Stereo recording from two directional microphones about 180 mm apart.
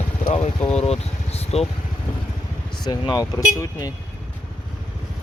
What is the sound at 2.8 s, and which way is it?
Speech, 20° left (ahead or behind).